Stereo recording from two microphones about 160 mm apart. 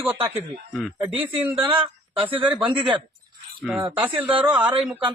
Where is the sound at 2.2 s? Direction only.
35° right (ahead or behind).